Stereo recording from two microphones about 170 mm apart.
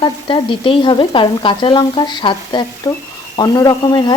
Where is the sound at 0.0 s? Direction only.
30° left (ahead or behind).